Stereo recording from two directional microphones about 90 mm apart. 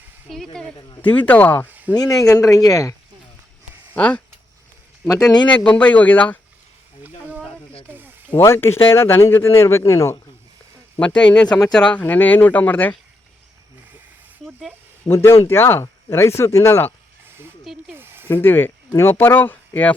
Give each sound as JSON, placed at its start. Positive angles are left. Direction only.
{"t": 0.3, "sound": "speech", "side_deg": 5}
{"t": 0.8, "sound": "speech", "side_deg": 55}
{"t": 1.3, "sound": "speech", "side_deg": 20}
{"t": 1.7, "sound": "a sound", "side_deg": -20}
{"t": 2.2, "sound": "speech", "side_deg": 35}
{"t": 3.9, "sound": "speech", "side_deg": 15}
{"t": 5.5, "sound": "speech", "side_deg": 15}
{"t": 7.0, "sound": "a sound", "side_deg": -15}
{"t": 8.4, "sound": "speech", "side_deg": 25}
{"t": 11.0, "sound": "speech", "side_deg": 10}
{"t": 15.0, "sound": "speech", "side_deg": 25}
{"t": 17.2, "sound": "a sound", "side_deg": -25}
{"t": 18.3, "sound": "speech", "side_deg": 25}